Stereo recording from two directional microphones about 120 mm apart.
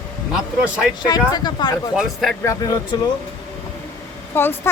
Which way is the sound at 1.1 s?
35° left (ahead or behind).